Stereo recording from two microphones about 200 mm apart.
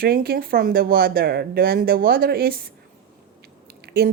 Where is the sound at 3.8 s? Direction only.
50° right (ahead or behind).